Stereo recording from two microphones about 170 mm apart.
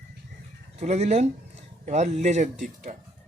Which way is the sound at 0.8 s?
40° right (ahead or behind).